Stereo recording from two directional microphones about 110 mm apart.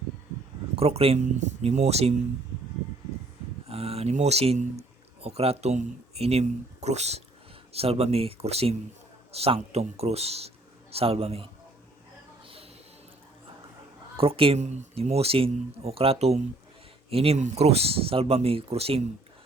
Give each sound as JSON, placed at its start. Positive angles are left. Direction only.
{"t": 0.8, "sound": "speech", "side_deg": -65}
{"t": 3.7, "sound": "speech", "side_deg": -65}
{"t": 7.7, "sound": "speech", "side_deg": -65}
{"t": 14.2, "sound": "speech", "side_deg": -55}